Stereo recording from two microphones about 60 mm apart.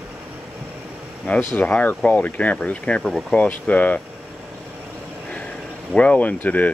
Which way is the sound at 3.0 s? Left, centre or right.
Centre.